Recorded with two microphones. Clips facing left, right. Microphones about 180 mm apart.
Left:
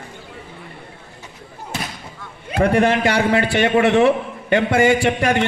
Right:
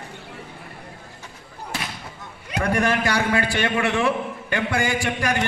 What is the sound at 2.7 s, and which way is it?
A man's voice, 25° left (ahead or behind).